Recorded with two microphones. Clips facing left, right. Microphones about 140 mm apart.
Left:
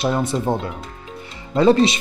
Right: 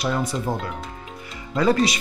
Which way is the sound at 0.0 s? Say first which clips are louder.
Left 4 dB; 25° left (ahead or behind).